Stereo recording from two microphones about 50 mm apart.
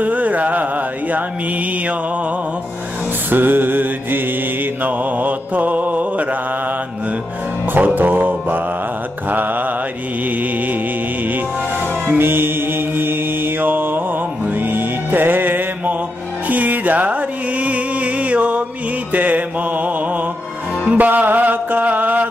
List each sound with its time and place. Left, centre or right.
0.0 s music: right
3.3 s music: right
4.8 s mantra: right
7.7 s music: right
12.2 s mantra: right
16.4 s music: right
19.1 s mantra: right
20.8 s music: right